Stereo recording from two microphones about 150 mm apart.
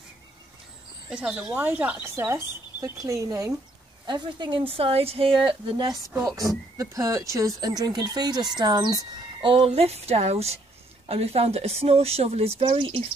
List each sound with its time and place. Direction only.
1.1 s speech: 5° right (ahead or behind); by 9.0 s 25° right (ahead or behind)
9.4 s speech: 35° right (ahead or behind)